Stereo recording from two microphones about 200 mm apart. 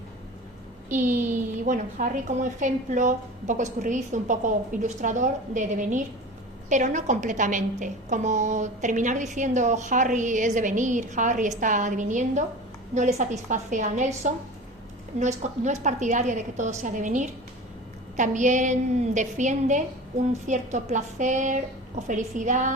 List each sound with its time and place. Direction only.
0.9 s a woman's voice: 40° right (ahead or behind)